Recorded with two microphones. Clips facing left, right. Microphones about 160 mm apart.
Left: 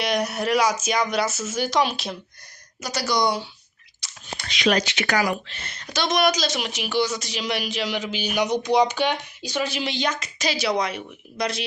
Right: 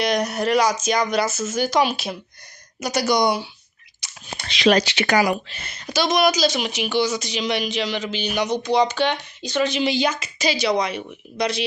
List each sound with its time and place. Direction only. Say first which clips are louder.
0.0 s speech: right 3 dB; 5° left (ahead or behind)
2.8 s speech: right 4 dB; 15° right (ahead or behind)
4.4 s speech: right 4 dB; 30° right (ahead or behind)
5.1 s speech: right 4 dB; 15° right (ahead or behind); by 9.9 s 5° left (ahead or behind)
9.9 s speech: right 4 dB; 5° right (ahead or behind)